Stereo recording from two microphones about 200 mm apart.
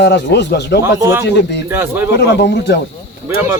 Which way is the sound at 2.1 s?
55° left (ahead or behind).